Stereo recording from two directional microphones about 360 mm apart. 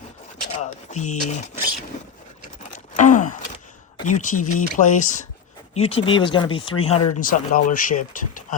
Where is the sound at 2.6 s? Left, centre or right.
Left.